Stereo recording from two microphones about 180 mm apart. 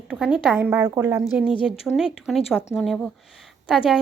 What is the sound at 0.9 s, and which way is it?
Speech, 20° right (ahead or behind).